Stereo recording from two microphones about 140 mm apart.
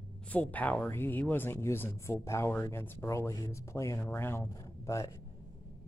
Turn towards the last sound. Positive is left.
turn(degrees=20)  # may be behind; listen again after turning